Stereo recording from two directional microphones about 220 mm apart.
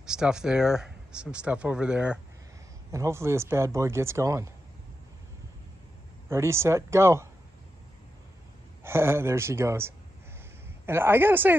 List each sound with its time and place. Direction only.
0.0 s speech: 5° right (ahead or behind)
6.2 s speech: 10° right (ahead or behind)
8.8 s speech: 10° right (ahead or behind)